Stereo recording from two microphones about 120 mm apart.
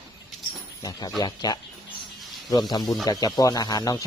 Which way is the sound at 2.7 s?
35° left (ahead or behind).